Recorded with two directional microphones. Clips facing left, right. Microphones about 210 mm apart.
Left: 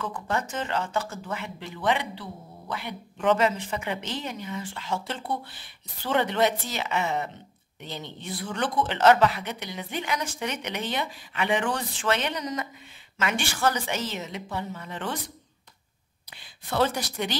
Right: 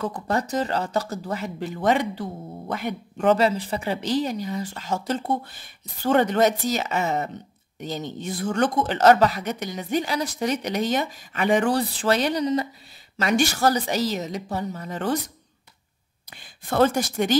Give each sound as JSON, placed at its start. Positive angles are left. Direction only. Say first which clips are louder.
{"t": 0.0, "sound": "a woman's voice", "louder": "right 4 dB", "side_deg": -40}